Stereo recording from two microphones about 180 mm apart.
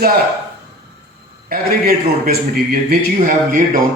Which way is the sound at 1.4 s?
55° right (ahead or behind).